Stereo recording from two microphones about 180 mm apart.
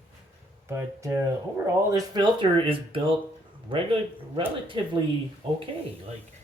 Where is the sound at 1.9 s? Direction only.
25° right (ahead or behind).